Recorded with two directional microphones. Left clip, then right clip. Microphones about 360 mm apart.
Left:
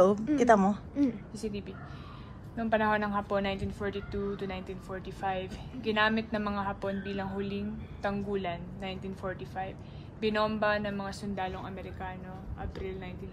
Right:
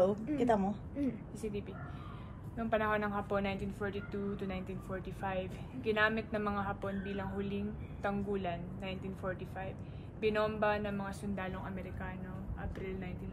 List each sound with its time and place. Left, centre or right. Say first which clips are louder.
0.0 s a woman's voice: left 7 dB; centre